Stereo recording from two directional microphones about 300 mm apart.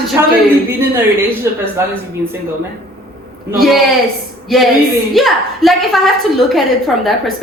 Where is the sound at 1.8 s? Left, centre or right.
Centre.